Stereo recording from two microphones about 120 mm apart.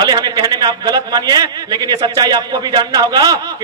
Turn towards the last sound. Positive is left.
turn(degrees=-30)  # may be behind; listen again after turning